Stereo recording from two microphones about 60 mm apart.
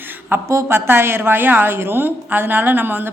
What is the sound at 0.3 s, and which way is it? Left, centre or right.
A woman's voice, right.